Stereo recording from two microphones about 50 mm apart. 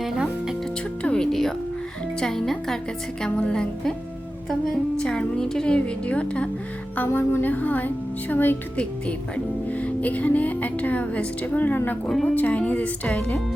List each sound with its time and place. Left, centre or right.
1.1 s music: centre
2.2 s speech: centre
3.2 s speech: left
4.9 s a woman's voice: centre
6.9 s speech: left
8.7 s a woman's voice: left
12.0 s speech: centre
12.3 s a woman's voice: left